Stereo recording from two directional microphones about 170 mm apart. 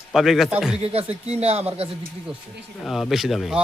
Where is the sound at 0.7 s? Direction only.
35° right (ahead or behind).